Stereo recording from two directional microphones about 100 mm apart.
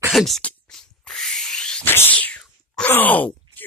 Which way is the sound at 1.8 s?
20° left (ahead or behind).